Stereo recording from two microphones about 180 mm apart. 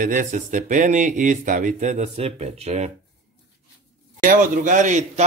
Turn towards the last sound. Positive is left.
turn(degrees=-40)  # may be behind; listen again after turning